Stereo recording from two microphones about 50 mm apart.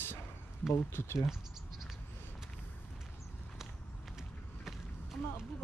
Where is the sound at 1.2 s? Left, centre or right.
Centre.